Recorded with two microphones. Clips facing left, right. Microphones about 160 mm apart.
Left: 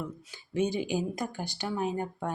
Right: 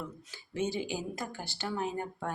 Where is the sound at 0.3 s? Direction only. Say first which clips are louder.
Left 5 dB; 15° left (ahead or behind).